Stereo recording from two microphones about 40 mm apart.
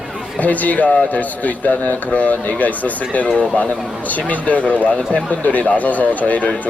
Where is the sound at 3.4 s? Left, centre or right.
Left.